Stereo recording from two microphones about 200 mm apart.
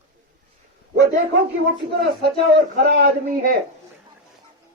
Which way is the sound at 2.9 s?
50° right (ahead or behind).